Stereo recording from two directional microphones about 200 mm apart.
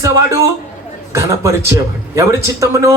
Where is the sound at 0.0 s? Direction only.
15° right (ahead or behind).